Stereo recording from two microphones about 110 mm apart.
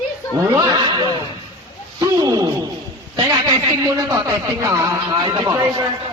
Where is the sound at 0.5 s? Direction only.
40° right (ahead or behind).